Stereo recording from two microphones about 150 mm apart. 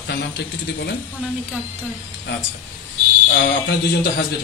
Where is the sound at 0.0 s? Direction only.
90° left.